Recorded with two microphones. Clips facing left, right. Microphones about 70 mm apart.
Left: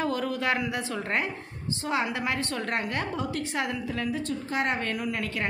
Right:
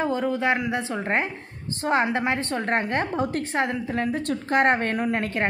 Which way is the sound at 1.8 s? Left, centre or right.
Right.